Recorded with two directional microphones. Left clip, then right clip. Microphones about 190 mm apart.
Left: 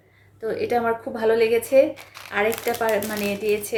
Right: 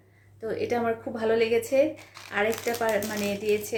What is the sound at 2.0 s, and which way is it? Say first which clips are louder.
Shuffling cards: left 5 dB; 25° left (ahead or behind).